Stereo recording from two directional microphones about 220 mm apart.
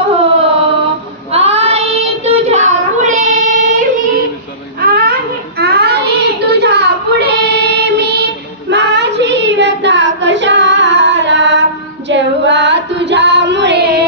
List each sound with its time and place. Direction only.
1.3 s child singing: 25° right (ahead or behind)
4.7 s baby cry: 45° right (ahead or behind)
5.6 s child singing: 45° right (ahead or behind)
12.1 s female singing: 55° right (ahead or behind)